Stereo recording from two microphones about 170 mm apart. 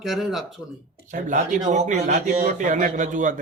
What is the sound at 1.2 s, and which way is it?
A man's voice, 50° right (ahead or behind).